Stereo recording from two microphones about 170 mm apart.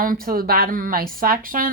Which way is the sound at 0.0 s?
55° right (ahead or behind).